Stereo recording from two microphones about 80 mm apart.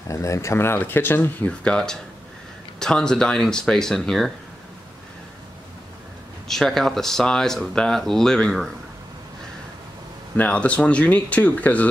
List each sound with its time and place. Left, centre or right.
0.1 s speech: left
1.5 s speech: centre
6.4 s speech: centre
10.3 s speech: centre